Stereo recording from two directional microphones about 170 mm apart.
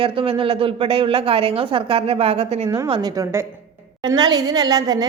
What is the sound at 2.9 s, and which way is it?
A woman's voice, 20° right (ahead or behind).